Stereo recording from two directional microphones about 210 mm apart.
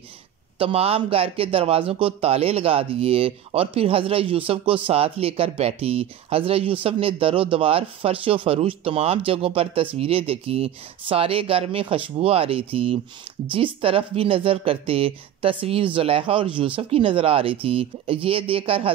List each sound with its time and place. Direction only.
0.6 s speech: 25° right (ahead or behind)